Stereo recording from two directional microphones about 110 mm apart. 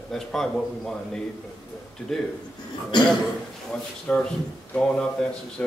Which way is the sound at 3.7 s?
10° left (ahead or behind).